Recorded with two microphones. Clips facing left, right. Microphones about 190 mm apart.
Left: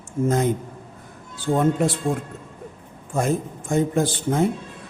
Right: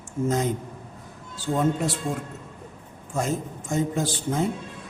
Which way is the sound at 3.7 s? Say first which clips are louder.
Left 5 dB; 55° left (ahead or behind).